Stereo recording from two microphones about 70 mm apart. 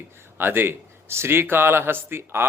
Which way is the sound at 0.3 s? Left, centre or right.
Right.